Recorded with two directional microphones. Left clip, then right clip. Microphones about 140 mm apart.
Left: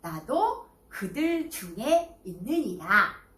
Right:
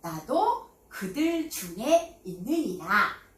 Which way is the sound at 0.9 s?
45° right (ahead or behind).